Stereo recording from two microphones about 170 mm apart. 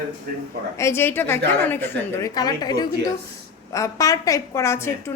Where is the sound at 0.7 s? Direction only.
15° left (ahead or behind).